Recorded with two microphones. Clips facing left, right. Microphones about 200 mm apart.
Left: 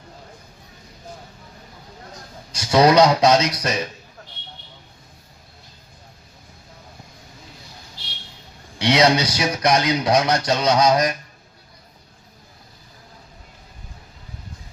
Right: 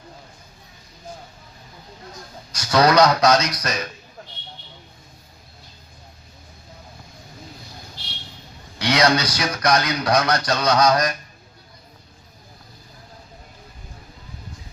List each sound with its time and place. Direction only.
2.5 s speech: 25° left (ahead or behind)
8.8 s speech: 25° left (ahead or behind)